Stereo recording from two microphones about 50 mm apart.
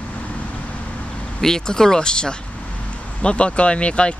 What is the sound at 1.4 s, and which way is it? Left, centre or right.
Speech, centre.